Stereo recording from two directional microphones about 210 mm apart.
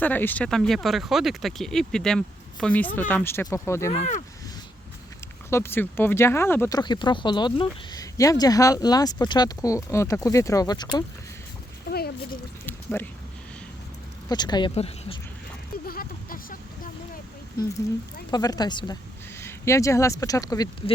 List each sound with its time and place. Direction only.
0.0 s speech: 10° left (ahead or behind)
5.5 s speech: 10° left (ahead or behind)
11.9 s a sound: 50° left (ahead or behind)
12.6 s a sound: 10° left (ahead or behind)
14.3 s speech: 20° left (ahead or behind)
15.9 s vehicle: 45° left (ahead or behind)
18.3 s speech: 20° left (ahead or behind)